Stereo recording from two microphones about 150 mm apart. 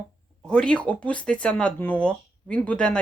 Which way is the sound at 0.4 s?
5° left (ahead or behind).